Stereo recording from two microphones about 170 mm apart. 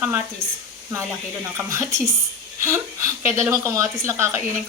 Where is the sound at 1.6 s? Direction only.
15° right (ahead or behind).